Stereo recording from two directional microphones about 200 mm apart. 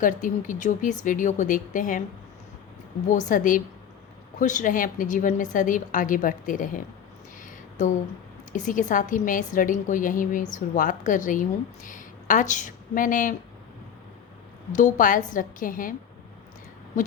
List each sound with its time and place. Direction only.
0.0 s a woman's voice: 40° left (ahead or behind)
3.1 s a woman's voice: 40° left (ahead or behind)
8.5 s a woman's voice: 40° left (ahead or behind)
14.7 s a woman's voice: 40° left (ahead or behind)